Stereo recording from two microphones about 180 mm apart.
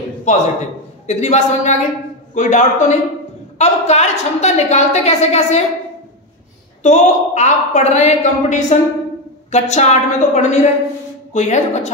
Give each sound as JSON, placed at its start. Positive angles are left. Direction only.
{"t": 0.3, "sound": "a man's voice", "side_deg": 45}
{"t": 6.8, "sound": "a woman's voice", "side_deg": 40}